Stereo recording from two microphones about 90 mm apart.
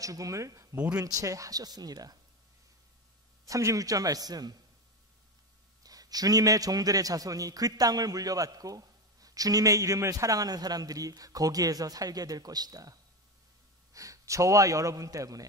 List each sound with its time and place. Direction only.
0.0 s a man's voice: 40° right (ahead or behind)
3.4 s speech: 40° right (ahead or behind)
5.9 s a man's voice: 45° right (ahead or behind)
13.9 s speech: 35° right (ahead or behind)